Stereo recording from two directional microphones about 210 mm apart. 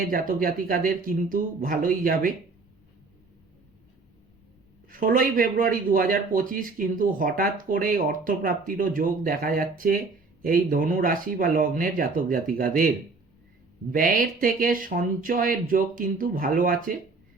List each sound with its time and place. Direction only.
0.1 s speech: 40° right (ahead or behind)
4.9 s speech: 40° right (ahead or behind)
13.9 s speech: 40° right (ahead or behind)